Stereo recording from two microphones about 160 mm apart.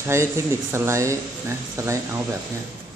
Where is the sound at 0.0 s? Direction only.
15° right (ahead or behind).